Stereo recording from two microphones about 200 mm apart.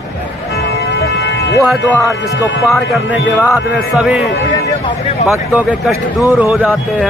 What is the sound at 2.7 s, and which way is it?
Speech, centre (ahead or behind).